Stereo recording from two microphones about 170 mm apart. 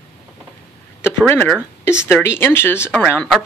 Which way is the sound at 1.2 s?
10° left (ahead or behind).